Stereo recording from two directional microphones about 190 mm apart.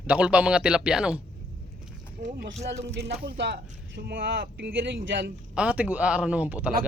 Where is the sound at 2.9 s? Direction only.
60° right (ahead or behind).